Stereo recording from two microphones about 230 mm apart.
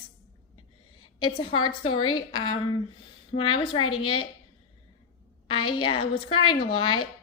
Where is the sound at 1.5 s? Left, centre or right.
Left.